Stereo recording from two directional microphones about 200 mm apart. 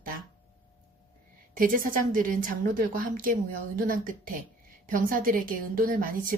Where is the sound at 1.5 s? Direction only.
45° right (ahead or behind).